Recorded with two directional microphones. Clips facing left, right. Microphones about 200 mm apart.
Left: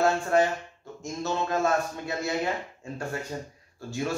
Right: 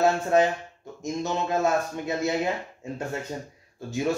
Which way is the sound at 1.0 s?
15° right (ahead or behind).